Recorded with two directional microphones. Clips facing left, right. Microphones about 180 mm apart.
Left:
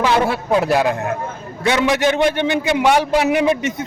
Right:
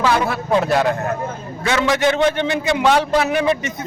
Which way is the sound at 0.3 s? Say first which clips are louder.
Left 1 dB; 10° left (ahead or behind).